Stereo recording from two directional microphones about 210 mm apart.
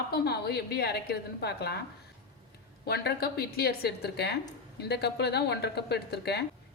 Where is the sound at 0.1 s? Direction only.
50° left (ahead or behind).